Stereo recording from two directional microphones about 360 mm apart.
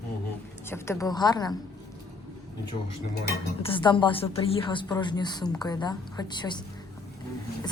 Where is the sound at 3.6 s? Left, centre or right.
Centre.